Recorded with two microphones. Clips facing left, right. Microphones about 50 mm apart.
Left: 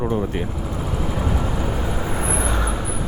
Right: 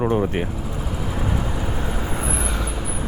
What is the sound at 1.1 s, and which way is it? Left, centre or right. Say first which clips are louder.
Vehicle: even; centre.